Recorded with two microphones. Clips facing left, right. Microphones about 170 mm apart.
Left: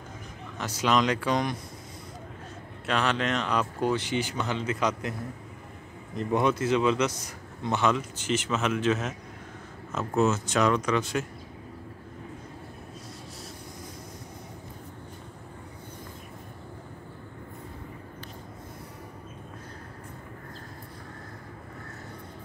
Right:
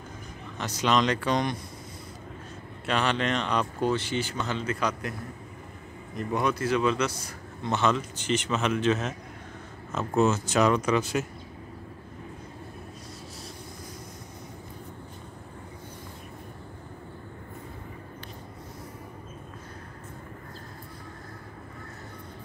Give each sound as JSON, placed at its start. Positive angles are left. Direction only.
{"t": 0.6, "sound": "a man's voice", "side_deg": 5}
{"t": 2.9, "sound": "speech", "side_deg": 0}
{"t": 3.9, "sound": "a man's voice", "side_deg": 15}
{"t": 6.1, "sound": "a man's voice", "side_deg": 25}